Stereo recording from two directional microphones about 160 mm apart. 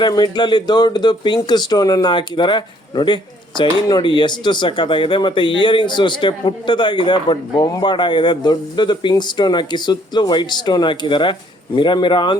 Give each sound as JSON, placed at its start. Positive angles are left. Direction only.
{"t": 0.0, "sound": "speech", "side_deg": 25}